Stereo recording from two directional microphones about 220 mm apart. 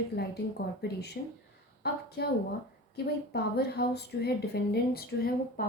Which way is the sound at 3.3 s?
45° left (ahead or behind).